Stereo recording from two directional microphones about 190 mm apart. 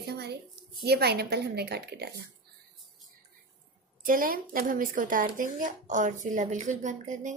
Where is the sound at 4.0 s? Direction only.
45° right (ahead or behind).